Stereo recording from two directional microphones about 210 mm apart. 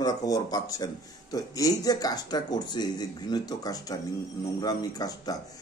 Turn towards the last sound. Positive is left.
turn(degrees=15)  # may be behind; listen again after turning